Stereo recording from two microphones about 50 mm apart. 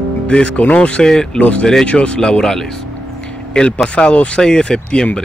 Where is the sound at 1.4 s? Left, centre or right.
Left.